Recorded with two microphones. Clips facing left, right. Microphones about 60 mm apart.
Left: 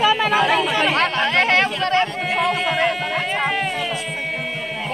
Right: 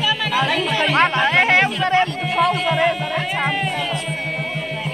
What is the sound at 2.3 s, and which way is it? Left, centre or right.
Music, centre.